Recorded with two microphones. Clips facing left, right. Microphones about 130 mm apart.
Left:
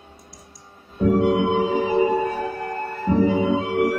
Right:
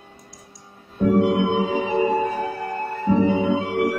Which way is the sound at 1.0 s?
Centre (ahead or behind).